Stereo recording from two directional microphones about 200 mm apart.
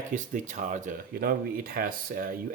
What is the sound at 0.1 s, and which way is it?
Speech, 40° right (ahead or behind).